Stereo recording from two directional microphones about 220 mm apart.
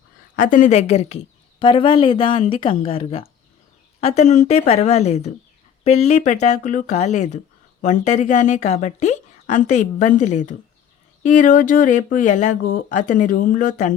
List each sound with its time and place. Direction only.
0.3 s a woman's voice: 35° left (ahead or behind)